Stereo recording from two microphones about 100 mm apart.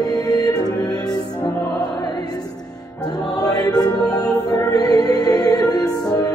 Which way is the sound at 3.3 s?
40° left (ahead or behind).